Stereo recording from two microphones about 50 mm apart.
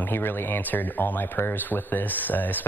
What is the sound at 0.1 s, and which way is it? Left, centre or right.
Speech, left.